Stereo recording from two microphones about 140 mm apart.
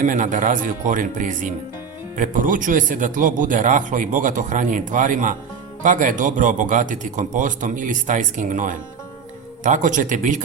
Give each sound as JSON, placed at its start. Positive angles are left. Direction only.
{"t": 0.0, "sound": "speech", "side_deg": -65}